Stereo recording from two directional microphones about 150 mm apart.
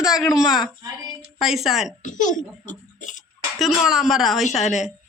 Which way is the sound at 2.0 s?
55° left (ahead or behind).